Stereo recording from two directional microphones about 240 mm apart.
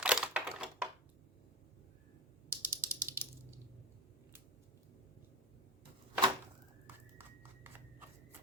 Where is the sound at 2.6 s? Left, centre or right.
Centre.